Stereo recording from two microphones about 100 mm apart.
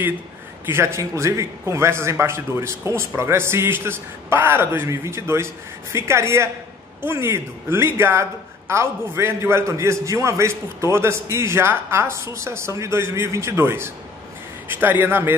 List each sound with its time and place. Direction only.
0.7 s speech: 25° right (ahead or behind)